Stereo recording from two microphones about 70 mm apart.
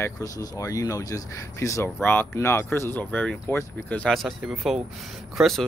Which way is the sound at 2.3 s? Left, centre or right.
Left.